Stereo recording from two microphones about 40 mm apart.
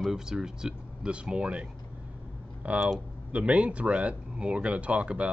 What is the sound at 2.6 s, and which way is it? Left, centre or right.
Speech, right.